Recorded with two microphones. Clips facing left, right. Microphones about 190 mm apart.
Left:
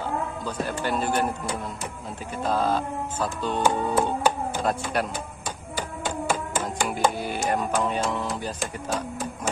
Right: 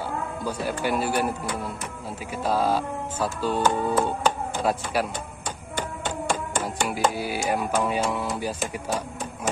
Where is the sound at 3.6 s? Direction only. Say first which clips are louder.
Left 1 dB; 15° left (ahead or behind).